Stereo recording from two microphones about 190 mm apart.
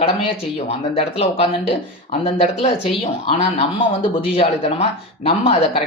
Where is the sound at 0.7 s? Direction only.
30° left (ahead or behind).